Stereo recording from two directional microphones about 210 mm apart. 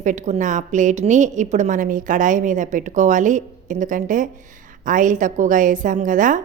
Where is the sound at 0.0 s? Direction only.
35° right (ahead or behind).